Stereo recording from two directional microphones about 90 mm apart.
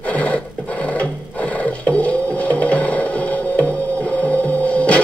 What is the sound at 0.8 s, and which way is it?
Sewing machine, 15° left (ahead or behind).